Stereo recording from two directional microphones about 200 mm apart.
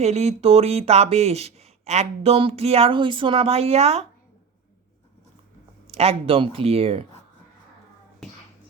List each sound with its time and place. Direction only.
0.0 s speech: 30° right (ahead or behind)
5.9 s speech: 30° right (ahead or behind)